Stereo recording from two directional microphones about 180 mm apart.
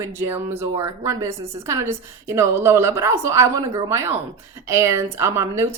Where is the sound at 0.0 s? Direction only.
15° right (ahead or behind).